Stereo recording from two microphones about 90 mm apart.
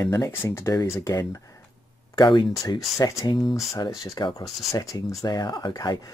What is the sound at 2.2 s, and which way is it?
Speech, 55° left (ahead or behind).